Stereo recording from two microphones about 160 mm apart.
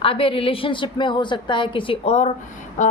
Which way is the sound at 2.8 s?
50° left (ahead or behind).